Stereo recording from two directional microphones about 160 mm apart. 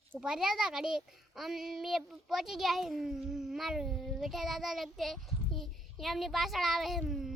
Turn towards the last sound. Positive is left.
turn(degrees=0)  # may be behind; listen again after turning